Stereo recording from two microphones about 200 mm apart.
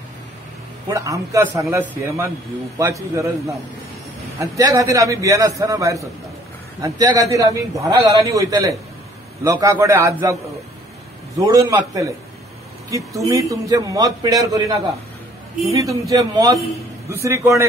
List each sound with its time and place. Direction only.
0.8 s a man's voice: 15° right (ahead or behind)
11.4 s a man's voice: 20° right (ahead or behind)
15.8 s a man's voice: 15° right (ahead or behind)